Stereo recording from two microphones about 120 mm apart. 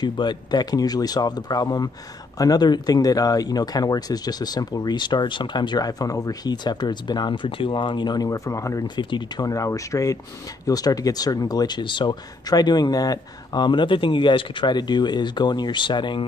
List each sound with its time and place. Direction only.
0.0 s speech: 40° left (ahead or behind)